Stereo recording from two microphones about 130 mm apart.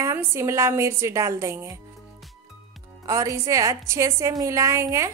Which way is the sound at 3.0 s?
25° right (ahead or behind).